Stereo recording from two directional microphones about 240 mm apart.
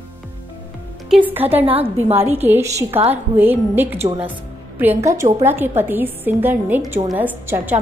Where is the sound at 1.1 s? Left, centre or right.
Centre.